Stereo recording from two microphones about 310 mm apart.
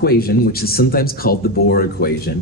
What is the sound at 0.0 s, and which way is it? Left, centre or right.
Speech, left.